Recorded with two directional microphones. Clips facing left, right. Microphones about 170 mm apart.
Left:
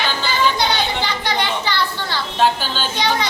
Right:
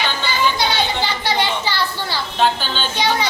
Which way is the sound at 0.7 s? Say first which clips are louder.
Even; 15° left (ahead or behind).